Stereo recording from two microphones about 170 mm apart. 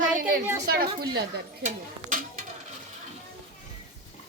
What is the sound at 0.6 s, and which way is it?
Speech, 65° right (ahead or behind).